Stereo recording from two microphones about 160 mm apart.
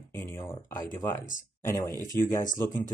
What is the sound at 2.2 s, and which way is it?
Speech, 15° left (ahead or behind).